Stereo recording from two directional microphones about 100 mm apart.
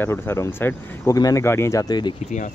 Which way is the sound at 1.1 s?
35° left (ahead or behind).